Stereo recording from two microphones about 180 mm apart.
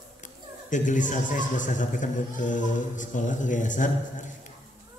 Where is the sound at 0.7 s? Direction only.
45° left (ahead or behind).